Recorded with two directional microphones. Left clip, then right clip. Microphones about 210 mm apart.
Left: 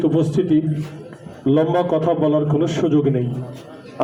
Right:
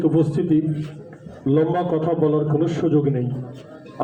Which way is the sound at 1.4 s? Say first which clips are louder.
Left 3 dB; 30° left (ahead or behind).